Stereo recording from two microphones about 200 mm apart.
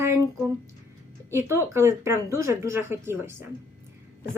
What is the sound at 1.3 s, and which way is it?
Speech, 15° right (ahead or behind).